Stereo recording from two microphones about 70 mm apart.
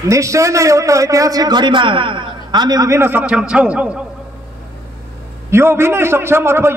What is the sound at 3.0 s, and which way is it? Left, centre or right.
Speech, centre.